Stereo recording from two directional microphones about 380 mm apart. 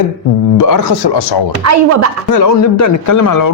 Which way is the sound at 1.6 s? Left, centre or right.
Right.